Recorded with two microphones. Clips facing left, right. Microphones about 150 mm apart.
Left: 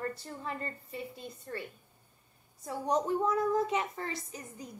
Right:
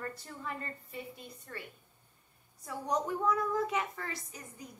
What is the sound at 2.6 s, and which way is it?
A woman's voice, 30° left (ahead or behind).